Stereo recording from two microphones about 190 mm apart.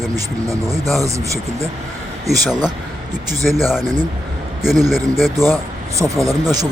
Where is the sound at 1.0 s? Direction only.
15° right (ahead or behind).